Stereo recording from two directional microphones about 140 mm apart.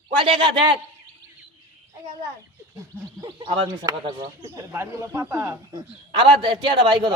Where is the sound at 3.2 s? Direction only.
35° right (ahead or behind).